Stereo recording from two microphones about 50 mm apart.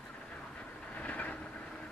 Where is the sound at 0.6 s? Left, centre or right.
Left.